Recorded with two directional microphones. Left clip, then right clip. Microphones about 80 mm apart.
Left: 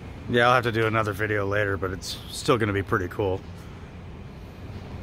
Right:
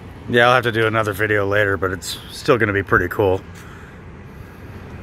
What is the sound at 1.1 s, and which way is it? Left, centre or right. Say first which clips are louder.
Speech: right 8 dB; right.